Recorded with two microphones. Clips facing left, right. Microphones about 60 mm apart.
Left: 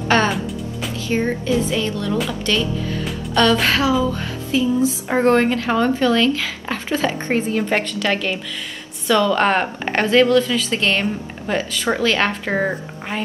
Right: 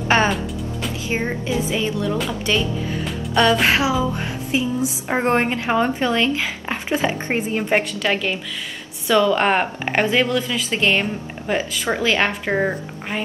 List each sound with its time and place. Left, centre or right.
0.1 s a woman's voice: centre